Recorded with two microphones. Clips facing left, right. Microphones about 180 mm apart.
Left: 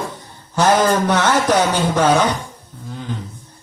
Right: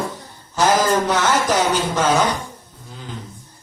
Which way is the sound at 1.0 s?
60° left (ahead or behind).